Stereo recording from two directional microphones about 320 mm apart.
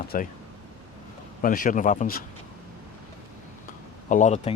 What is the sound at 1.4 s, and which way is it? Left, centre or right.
Speech, left.